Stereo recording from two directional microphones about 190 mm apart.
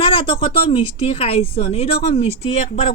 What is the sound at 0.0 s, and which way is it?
Speech, 25° left (ahead or behind).